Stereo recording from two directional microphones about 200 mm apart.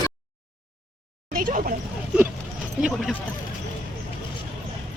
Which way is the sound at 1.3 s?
45° right (ahead or behind).